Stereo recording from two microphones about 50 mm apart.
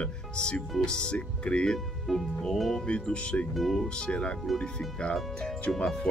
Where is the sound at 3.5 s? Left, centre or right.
Centre.